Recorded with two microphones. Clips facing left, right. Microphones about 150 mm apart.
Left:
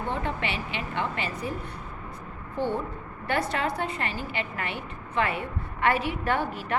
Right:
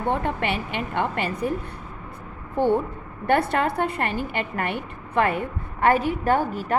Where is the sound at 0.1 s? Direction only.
55° right (ahead or behind).